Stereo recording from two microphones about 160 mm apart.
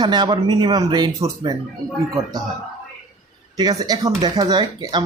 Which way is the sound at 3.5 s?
25° right (ahead or behind).